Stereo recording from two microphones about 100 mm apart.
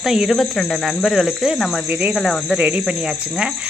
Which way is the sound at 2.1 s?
Centre (ahead or behind).